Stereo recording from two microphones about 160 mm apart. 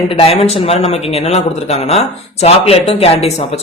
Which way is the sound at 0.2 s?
40° left (ahead or behind).